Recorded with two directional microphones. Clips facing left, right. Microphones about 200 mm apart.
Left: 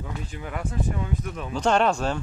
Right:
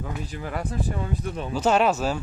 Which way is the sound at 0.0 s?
40° right (ahead or behind).